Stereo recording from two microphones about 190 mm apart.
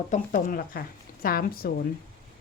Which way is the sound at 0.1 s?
45° left (ahead or behind).